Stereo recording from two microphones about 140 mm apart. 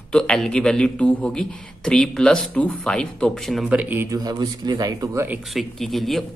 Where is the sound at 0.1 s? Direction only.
5° left (ahead or behind).